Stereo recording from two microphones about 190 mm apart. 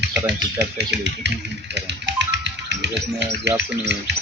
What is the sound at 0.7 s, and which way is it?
Speech, 65° right (ahead or behind).